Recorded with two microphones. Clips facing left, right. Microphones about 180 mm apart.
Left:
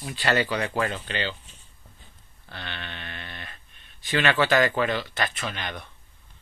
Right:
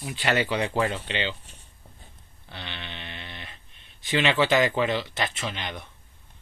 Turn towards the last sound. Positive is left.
turn(degrees=-20)  # may be behind; listen again after turning